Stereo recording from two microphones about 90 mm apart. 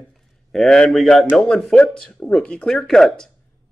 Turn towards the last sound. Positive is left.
turn(degrees=5)  # may be behind; listen again after turning